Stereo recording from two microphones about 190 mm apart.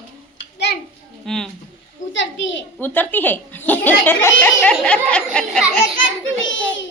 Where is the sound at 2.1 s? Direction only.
80° left.